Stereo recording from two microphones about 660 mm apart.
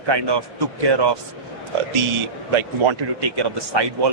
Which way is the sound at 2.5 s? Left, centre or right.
Right.